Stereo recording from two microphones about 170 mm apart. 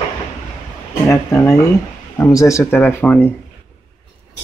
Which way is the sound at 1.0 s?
15° left (ahead or behind).